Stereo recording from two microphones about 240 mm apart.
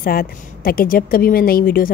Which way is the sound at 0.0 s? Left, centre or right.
Left.